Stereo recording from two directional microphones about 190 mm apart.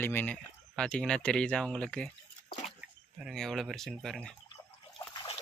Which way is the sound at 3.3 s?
Centre (ahead or behind).